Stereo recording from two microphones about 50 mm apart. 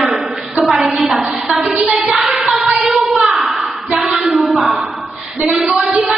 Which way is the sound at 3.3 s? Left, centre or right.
Centre.